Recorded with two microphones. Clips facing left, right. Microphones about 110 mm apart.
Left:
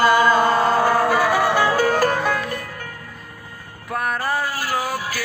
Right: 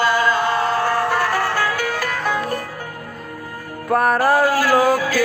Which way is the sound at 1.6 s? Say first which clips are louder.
Left 5 dB; 35° left (ahead or behind).